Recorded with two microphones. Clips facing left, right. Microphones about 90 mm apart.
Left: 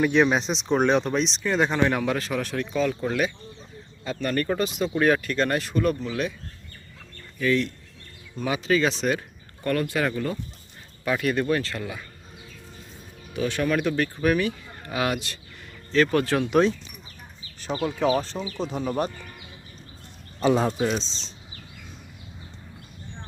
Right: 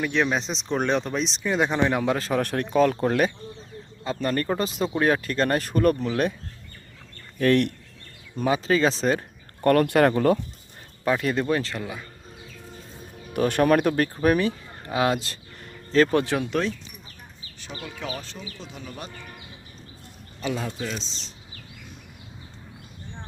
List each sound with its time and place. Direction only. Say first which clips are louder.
0.0 s speech: left 4 dB; 10° left (ahead or behind); by 2.0 s 10° right (ahead or behind)
2.0 s speech: right 2 dB; 30° right (ahead or behind)
2.4 s speech: right 4 dB; 55° right (ahead or behind)
4.0 s speech: right 1 dB; 30° right (ahead or behind); by 6.1 s 50° right (ahead or behind)
7.3 s speech: right 3 dB; 60° right (ahead or behind)
8.4 s speech: right 2 dB; 30° right (ahead or behind)
9.6 s speech: right 7 dB; 60° right (ahead or behind)
11.1 s speech: even; 25° right (ahead or behind)
13.3 s speech: right 5 dB; 50° right (ahead or behind); by 15.4 s 30° right (ahead or behind)
16.1 s speech: even; 15° right (ahead or behind)
16.5 s speech: left 6 dB; 20° left (ahead or behind)
17.6 s speech: left 11 dB; 35° left (ahead or behind)
20.4 s speech: left 8 dB; 40° left (ahead or behind)